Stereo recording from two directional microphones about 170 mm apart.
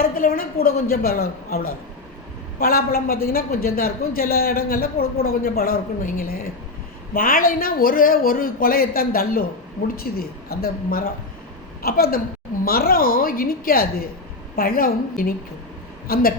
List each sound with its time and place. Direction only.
0.0 s a woman's voice: 60° left (ahead or behind)